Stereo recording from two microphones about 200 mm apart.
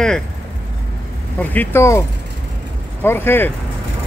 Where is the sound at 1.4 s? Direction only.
10° left (ahead or behind).